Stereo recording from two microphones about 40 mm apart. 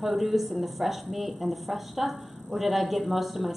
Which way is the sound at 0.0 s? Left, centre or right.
Centre.